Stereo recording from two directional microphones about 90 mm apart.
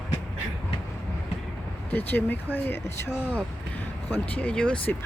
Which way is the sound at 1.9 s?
20° left (ahead or behind).